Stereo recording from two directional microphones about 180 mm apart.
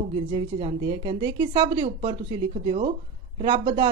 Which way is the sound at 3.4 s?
25° right (ahead or behind).